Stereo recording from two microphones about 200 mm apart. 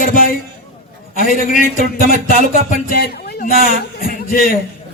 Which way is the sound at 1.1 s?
40° left (ahead or behind).